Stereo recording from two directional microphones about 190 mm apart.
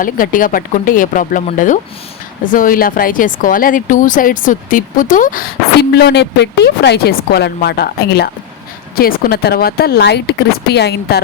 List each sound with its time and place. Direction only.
0.0 s speech: 45° left (ahead or behind)
5.9 s speech: 60° left (ahead or behind)